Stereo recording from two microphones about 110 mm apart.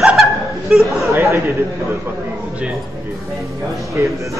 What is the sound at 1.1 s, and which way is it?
Speech, 25° right (ahead or behind).